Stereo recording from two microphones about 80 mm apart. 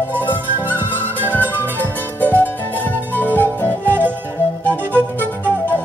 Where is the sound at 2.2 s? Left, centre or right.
Left.